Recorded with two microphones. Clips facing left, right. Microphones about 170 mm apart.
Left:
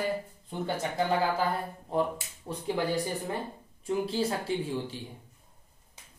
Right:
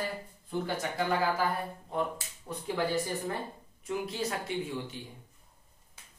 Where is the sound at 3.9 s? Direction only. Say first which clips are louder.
Left 4 dB; 30° left (ahead or behind).